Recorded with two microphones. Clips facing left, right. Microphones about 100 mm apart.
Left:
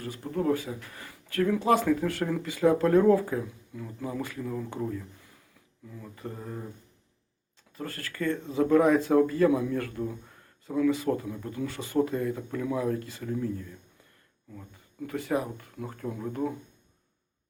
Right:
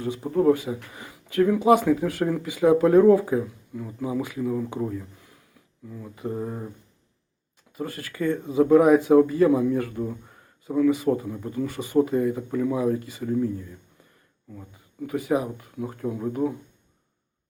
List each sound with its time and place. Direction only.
0.0 s speech: 15° right (ahead or behind)
6.3 s speech: 20° right (ahead or behind)
7.8 s speech: 10° right (ahead or behind)